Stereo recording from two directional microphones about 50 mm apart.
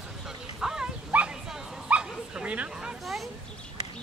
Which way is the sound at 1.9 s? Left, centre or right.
Right.